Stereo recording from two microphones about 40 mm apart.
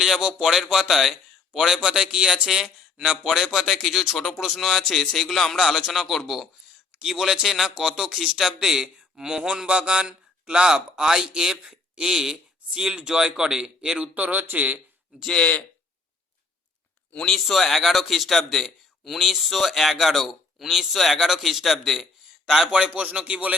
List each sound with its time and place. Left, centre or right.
0.0 s a man's voice: centre
3.2 s a man's voice: centre
7.0 s a man's voice: centre
9.6 s a man's voice: right
14.0 s music: right
17.2 s speech: centre
17.4 s a man's voice: centre
22.7 s speech: right
23.0 s music: right